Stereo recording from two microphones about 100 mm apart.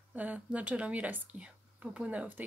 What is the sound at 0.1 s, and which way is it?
A woman's voice, 15° right (ahead or behind).